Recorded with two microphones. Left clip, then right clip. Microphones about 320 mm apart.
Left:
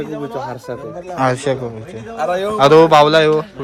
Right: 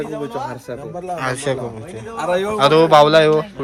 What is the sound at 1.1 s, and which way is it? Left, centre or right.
Speech, centre.